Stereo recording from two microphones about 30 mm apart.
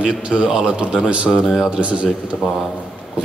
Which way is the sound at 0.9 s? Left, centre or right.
Right.